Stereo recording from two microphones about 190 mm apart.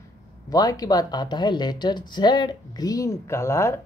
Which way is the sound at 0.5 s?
20° left (ahead or behind).